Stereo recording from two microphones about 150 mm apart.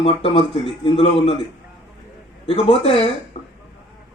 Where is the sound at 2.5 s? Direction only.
40° left (ahead or behind).